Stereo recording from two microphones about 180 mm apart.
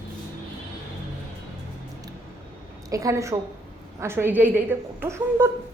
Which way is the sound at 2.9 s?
20° right (ahead or behind).